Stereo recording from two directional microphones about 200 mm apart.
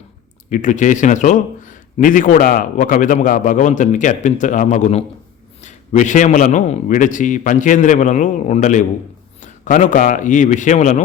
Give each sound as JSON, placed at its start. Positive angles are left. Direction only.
{"t": 0.5, "sound": "a man's voice", "side_deg": 40}